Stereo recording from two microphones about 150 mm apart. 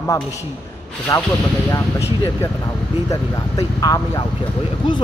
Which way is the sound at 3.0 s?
25° left (ahead or behind).